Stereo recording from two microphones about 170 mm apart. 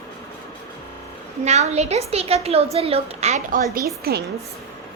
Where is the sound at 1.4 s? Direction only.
40° right (ahead or behind).